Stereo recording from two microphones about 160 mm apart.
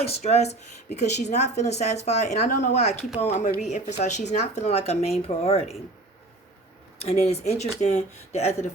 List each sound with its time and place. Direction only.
0.0 s a woman's voice: 40° left (ahead or behind)
7.0 s a woman's voice: 40° left (ahead or behind)